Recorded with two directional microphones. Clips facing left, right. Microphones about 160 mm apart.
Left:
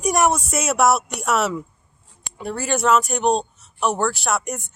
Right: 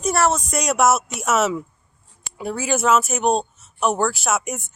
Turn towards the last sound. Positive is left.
turn(degrees=0)  # may be behind; listen again after turning